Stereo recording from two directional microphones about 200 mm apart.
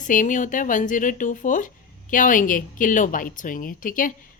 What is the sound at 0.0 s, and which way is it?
A woman's voice, 40° left (ahead or behind).